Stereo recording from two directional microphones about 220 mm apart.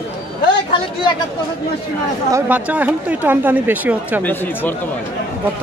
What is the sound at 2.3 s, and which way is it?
Speech, 10° right (ahead or behind).